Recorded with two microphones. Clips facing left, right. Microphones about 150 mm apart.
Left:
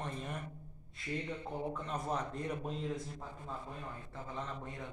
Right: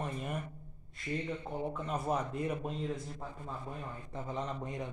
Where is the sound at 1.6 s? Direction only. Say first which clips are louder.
Right 3 dB; 5° right (ahead or behind).